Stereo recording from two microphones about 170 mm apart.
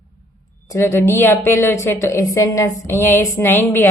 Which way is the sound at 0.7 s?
15° left (ahead or behind).